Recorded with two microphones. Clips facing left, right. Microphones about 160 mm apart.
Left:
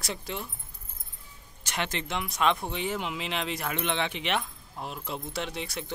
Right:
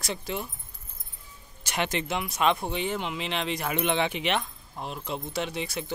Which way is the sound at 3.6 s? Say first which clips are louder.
Right 5 dB; 10° right (ahead or behind).